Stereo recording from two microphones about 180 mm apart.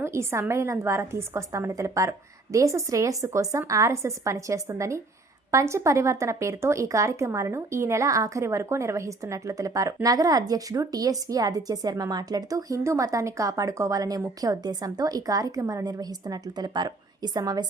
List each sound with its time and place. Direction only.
0.0 s a woman's voice: 15° right (ahead or behind)